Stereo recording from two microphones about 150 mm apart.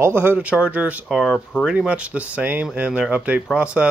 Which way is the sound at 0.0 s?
15° right (ahead or behind).